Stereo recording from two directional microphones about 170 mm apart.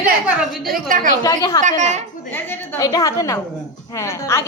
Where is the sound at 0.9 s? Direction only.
50° right (ahead or behind).